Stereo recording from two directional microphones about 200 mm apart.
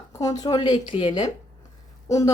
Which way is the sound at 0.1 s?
15° left (ahead or behind).